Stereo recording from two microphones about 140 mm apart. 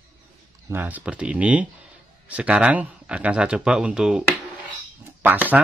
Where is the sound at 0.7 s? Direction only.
15° right (ahead or behind).